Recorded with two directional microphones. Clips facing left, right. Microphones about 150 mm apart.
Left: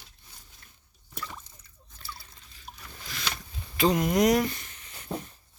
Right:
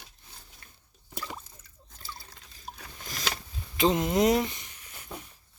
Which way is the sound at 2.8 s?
45° right (ahead or behind).